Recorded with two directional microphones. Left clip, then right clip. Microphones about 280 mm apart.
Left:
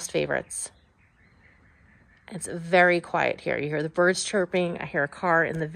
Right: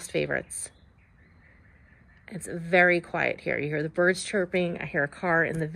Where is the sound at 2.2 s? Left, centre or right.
Centre.